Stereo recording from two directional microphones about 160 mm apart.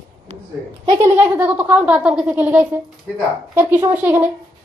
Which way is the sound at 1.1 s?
10° right (ahead or behind).